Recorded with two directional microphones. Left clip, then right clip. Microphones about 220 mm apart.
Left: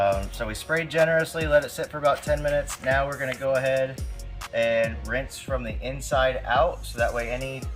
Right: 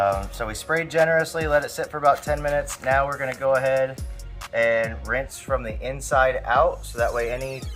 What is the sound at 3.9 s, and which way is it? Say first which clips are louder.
Music: right 1 dB; centre (ahead or behind).